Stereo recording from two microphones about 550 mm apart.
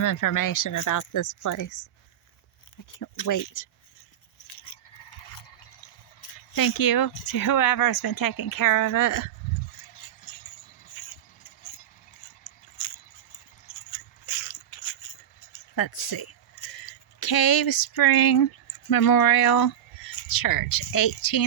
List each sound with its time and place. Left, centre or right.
0.0 s speech: left
2.9 s speech: left
4.4 s a sound: left
6.5 s speech: left
12.8 s a sound: left
18.9 s speech: left